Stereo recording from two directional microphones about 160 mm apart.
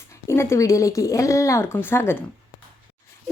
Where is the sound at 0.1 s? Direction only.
15° left (ahead or behind).